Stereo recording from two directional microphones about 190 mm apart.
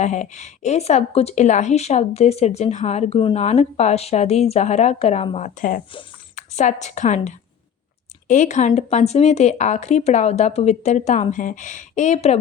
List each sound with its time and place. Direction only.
0.0 s speech: 40° left (ahead or behind)
5.9 s speech: 25° left (ahead or behind)
6.3 s a woman's voice: 40° left (ahead or behind)